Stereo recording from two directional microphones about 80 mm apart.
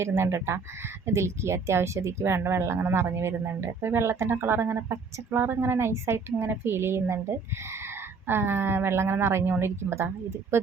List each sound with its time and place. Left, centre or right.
0.0 s speech: right